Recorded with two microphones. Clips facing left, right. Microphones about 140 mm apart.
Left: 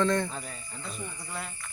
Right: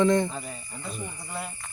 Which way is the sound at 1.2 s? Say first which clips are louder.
Right 4 dB; 10° right (ahead or behind).